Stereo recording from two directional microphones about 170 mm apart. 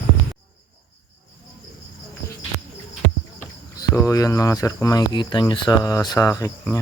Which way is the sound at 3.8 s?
20° left (ahead or behind).